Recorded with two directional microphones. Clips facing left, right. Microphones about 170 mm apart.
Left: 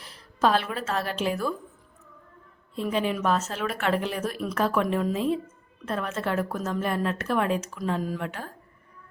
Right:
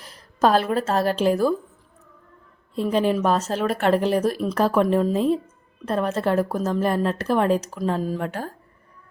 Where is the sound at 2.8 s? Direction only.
35° right (ahead or behind).